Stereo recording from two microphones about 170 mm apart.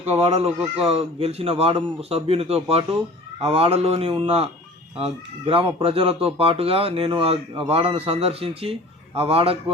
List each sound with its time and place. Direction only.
0.0 s speech: 40° right (ahead or behind)